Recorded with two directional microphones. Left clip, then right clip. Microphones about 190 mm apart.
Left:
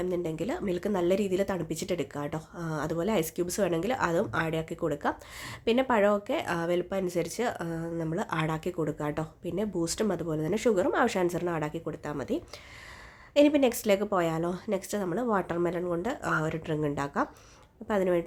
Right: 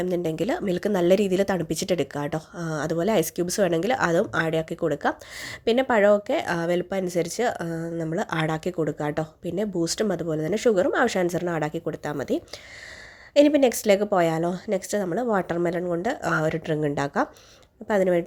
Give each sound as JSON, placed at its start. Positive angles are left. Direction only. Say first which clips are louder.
{"t": 0.0, "sound": "a woman's voice", "louder": "right 6 dB", "side_deg": -30}